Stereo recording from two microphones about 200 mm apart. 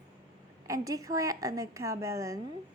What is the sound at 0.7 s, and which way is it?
A woman's voice, 15° right (ahead or behind).